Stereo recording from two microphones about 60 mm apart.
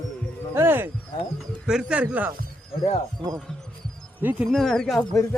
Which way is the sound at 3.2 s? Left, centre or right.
Centre.